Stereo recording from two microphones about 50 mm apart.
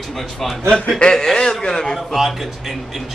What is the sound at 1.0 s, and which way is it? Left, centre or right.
Speech, centre.